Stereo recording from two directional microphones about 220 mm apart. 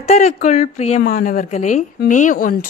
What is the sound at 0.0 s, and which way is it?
A woman's voice, 30° left (ahead or behind).